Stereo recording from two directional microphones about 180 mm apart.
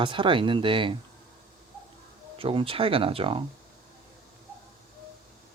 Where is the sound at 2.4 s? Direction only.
30° right (ahead or behind).